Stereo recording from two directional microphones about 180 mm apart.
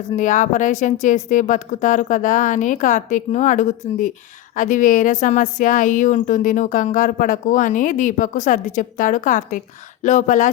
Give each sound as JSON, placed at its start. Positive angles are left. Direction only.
{"t": 0.2, "sound": "speech", "side_deg": 45}